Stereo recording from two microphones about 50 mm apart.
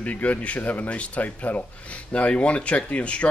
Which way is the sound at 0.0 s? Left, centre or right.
Left.